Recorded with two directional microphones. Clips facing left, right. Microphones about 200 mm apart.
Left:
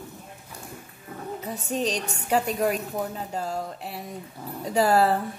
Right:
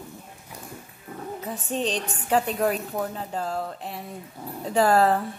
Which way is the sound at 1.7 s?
35° right (ahead or behind).